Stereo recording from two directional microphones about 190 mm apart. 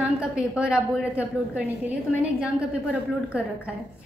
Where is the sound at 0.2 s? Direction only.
5° right (ahead or behind).